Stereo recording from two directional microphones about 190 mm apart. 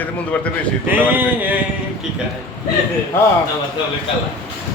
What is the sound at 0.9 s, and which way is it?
Speech, 10° right (ahead or behind).